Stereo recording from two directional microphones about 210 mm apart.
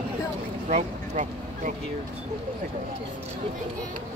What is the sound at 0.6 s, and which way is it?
Speech, 35° right (ahead or behind).